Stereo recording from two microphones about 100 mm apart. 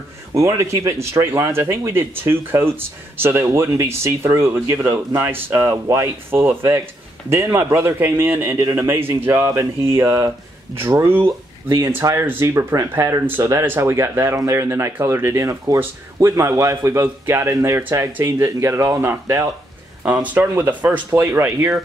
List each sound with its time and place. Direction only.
0.3 s speech: 30° right (ahead or behind)
5.7 s speech: 35° right (ahead or behind)
6.3 s speech: 25° right (ahead or behind)
20.3 s speech: 20° right (ahead or behind)